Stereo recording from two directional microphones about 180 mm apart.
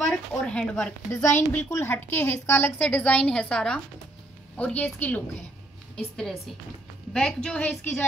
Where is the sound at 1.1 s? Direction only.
15° left (ahead or behind).